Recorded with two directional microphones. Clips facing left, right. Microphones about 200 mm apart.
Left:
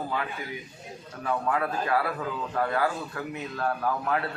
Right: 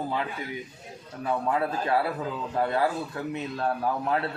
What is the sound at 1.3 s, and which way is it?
A man's voice, 25° right (ahead or behind).